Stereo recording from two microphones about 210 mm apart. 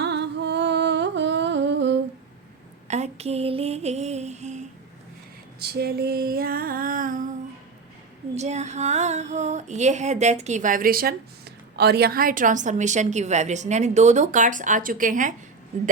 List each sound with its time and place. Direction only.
0.0 s humming: 55° right (ahead or behind)
2.8 s a sound: 30° right (ahead or behind)
5.5 s female singing: 50° right (ahead or behind)
8.4 s a woman's voice: 30° right (ahead or behind)